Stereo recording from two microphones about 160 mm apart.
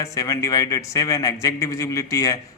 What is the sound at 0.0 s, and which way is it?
A man's voice, 20° left (ahead or behind).